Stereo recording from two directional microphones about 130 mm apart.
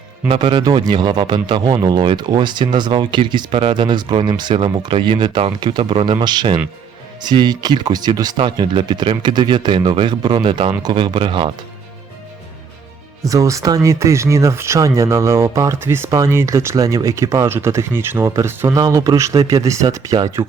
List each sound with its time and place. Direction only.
0.3 s speech: 40° right (ahead or behind)
13.2 s speech: 25° right (ahead or behind)